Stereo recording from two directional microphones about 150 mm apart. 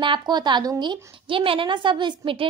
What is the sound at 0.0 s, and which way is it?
A woman's voice, 30° right (ahead or behind).